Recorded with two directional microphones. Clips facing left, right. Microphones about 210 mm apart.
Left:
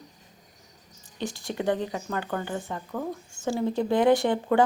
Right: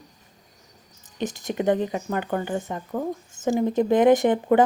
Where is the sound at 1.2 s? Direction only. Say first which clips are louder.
Right 4 dB; 20° right (ahead or behind).